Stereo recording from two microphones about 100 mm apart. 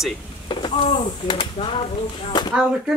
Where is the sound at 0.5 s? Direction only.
50° left (ahead or behind).